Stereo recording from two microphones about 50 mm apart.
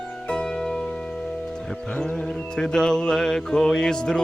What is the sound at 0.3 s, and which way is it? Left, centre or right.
Music, centre.